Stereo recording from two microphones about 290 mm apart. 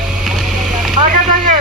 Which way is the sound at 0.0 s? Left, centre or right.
Centre.